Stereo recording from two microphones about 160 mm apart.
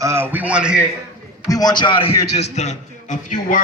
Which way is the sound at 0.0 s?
15° right (ahead or behind).